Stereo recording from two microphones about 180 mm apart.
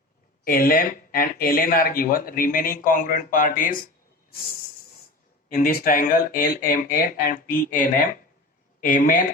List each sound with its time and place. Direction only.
0.4 s speech: 55° left (ahead or behind)
5.5 s speech: 50° left (ahead or behind)